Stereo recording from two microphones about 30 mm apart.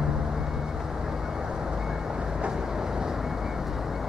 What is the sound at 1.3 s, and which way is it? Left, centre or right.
Vehicle, centre.